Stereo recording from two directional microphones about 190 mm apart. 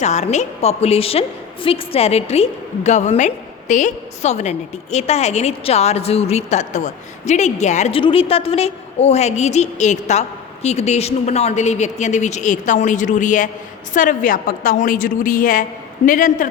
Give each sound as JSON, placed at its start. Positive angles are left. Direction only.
{"t": 0.0, "sound": "a woman's voice", "side_deg": 35}